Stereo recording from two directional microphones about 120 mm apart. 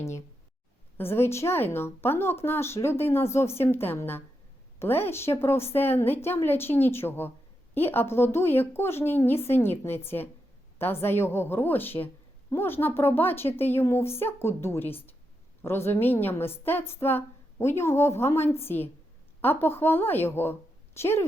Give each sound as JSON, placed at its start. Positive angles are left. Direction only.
{"t": 0.9, "sound": "a woman's voice", "side_deg": 20}